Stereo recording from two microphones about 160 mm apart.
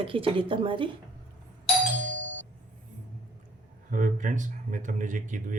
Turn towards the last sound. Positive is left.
turn(degrees=-55)  # may be behind; listen again after turning